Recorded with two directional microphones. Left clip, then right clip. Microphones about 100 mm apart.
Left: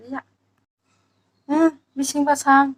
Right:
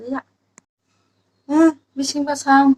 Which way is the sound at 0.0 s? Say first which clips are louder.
Right 5 dB; 20° right (ahead or behind).